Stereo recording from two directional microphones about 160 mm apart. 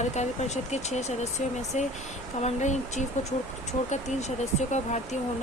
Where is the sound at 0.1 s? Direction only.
45° left (ahead or behind).